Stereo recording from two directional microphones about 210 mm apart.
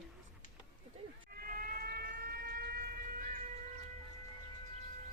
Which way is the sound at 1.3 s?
45° right (ahead or behind).